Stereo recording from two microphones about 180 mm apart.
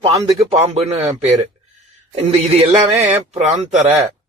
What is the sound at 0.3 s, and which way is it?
Speech, 35° right (ahead or behind).